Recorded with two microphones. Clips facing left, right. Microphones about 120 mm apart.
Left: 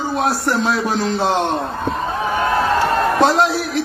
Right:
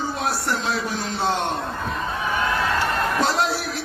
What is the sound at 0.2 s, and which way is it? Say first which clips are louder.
A man's voice: left 9 dB; 65° left (ahead or behind).